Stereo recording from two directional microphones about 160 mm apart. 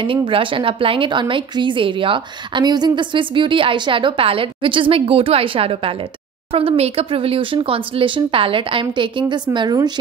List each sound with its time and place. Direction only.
0.0 s speech: 35° right (ahead or behind)